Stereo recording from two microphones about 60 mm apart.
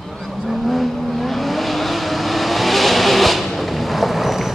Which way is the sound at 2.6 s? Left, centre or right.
Centre.